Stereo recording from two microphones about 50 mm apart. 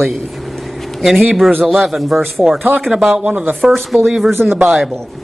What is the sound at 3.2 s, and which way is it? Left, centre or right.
Speech, right.